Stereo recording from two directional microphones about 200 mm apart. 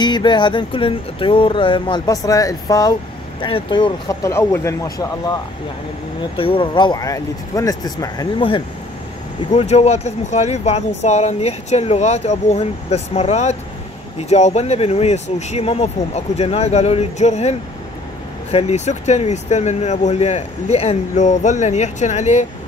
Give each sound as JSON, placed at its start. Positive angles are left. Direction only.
{"t": 0.0, "sound": "music", "side_deg": 20}
{"t": 9.5, "sound": "speech", "side_deg": 30}